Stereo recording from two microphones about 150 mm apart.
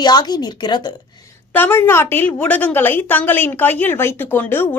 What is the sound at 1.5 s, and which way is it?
A woman's voice, 15° left (ahead or behind).